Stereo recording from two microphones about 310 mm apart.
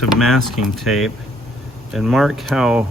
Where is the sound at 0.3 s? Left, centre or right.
Centre.